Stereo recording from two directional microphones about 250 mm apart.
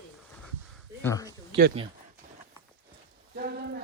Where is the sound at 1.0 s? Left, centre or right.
Centre.